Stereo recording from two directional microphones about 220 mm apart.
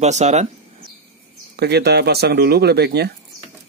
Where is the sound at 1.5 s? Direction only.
45° right (ahead or behind).